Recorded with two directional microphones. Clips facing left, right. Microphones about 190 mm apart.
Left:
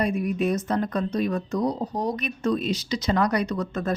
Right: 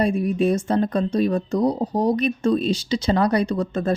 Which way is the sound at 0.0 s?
30° right (ahead or behind).